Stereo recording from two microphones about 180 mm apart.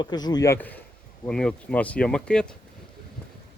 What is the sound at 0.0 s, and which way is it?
Speech, 25° left (ahead or behind).